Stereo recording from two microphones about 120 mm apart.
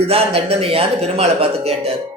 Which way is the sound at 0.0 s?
55° right (ahead or behind).